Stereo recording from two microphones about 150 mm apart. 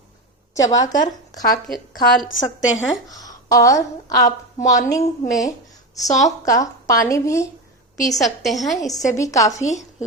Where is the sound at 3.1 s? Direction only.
25° left (ahead or behind).